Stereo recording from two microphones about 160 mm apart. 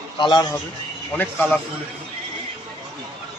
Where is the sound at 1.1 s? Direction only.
10° left (ahead or behind).